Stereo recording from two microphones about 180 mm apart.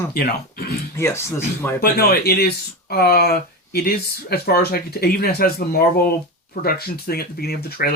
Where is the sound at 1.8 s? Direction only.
60° left (ahead or behind).